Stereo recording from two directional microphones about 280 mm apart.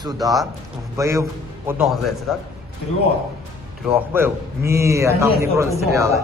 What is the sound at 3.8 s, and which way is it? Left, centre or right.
A man's voice, centre.